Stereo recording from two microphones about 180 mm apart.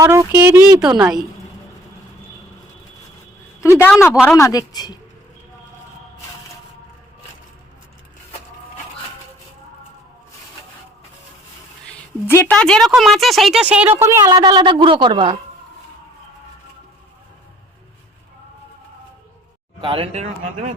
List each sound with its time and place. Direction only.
0.0 s a woman's voice: 15° right (ahead or behind)
3.8 s speech: 15° left (ahead or behind)
11.9 s a woman's voice: 10° left (ahead or behind); by 13.9 s 5° right (ahead or behind)
14.1 s a woman's voice: 20° right (ahead or behind)
19.8 s speech: 30° right (ahead or behind)